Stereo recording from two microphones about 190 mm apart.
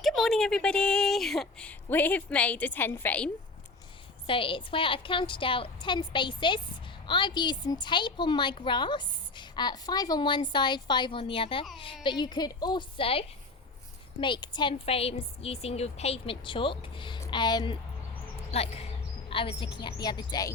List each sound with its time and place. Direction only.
0.0 s a woman's voice: centre (ahead or behind)
4.3 s a woman's voice: 25° left (ahead or behind)
18.5 s a woman's voice: 30° left (ahead or behind)